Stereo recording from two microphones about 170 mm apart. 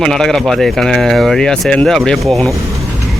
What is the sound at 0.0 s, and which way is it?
Speech, 5° left (ahead or behind).